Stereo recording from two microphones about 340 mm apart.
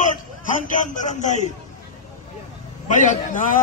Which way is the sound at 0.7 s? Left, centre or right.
Left.